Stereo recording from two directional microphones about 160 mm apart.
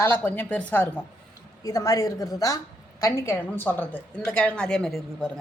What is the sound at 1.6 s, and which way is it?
A woman's voice, 20° left (ahead or behind).